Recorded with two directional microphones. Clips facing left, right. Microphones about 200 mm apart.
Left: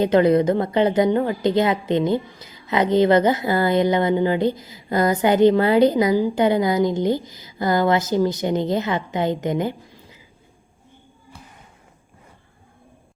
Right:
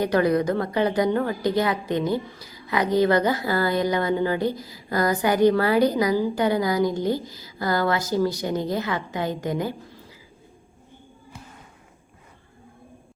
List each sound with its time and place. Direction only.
0.0 s a woman's voice: 20° left (ahead or behind)